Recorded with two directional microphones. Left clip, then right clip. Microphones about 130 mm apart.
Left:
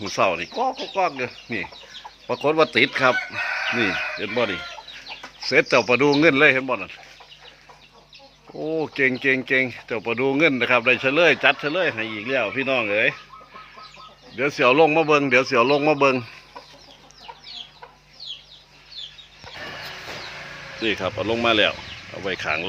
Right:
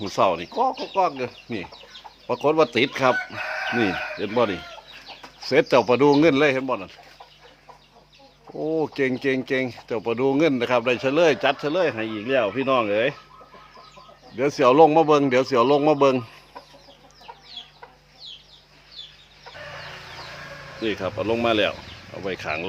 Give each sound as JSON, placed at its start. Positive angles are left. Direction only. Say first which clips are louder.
{"t": 0.0, "sound": "speech", "louder": "even", "side_deg": -30}
{"t": 5.5, "sound": "speech", "louder": "even", "side_deg": -40}
{"t": 5.8, "sound": "speech", "louder": "even", "side_deg": -30}
{"t": 6.1, "sound": "speech", "louder": "left 2 dB", "side_deg": -20}
{"t": 8.5, "sound": "speech", "louder": "even", "side_deg": -15}
{"t": 14.3, "sound": "speech", "louder": "right 1 dB", "side_deg": -35}
{"t": 20.8, "sound": "speech", "louder": "left 2 dB", "side_deg": -5}